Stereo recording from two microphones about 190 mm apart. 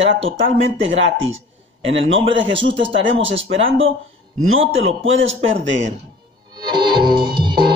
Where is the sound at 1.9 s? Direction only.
80° right.